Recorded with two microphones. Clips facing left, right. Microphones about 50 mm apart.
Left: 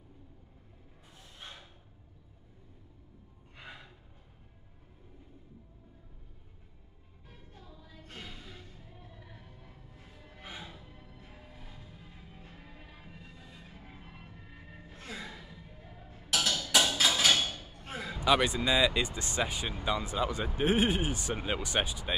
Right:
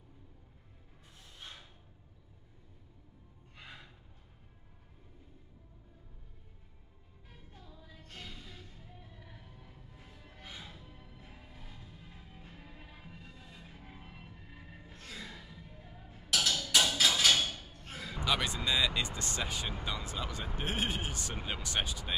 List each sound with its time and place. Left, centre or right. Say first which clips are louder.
3.5 s gasp: left 3 dB; centre
7.2 s music: left 2 dB; centre
8.0 s music: left 2 dB; centre
8.7 s music: left 2 dB; centre
10.3 s music: left 4 dB; centre
10.9 s music: left 1 dB; centre
15.0 s music: left 4 dB; left
15.3 s music: left 1 dB; centre
17.7 s basketball bounce: left 5 dB; centre
18.2 s speech: left 6 dB; centre